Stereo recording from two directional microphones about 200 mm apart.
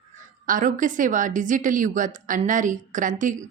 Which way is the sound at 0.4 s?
40° right (ahead or behind).